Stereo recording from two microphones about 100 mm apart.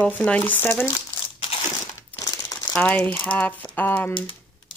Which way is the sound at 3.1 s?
15° left (ahead or behind).